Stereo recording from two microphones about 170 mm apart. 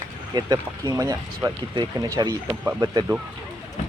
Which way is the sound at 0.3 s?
20° right (ahead or behind).